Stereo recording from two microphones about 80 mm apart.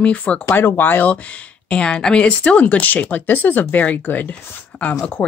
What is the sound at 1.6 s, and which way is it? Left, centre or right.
Speech, centre.